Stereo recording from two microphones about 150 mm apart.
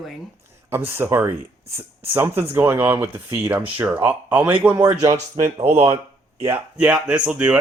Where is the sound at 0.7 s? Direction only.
15° right (ahead or behind).